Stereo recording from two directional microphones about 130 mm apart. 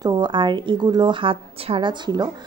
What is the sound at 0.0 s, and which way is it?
Speech, 30° right (ahead or behind).